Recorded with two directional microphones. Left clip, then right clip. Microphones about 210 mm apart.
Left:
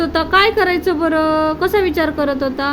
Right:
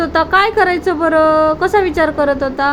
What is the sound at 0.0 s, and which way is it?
A woman's voice, 10° left (ahead or behind).